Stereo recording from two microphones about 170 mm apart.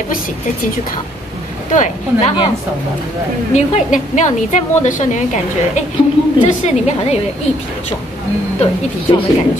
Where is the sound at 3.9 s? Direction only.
45° left (ahead or behind).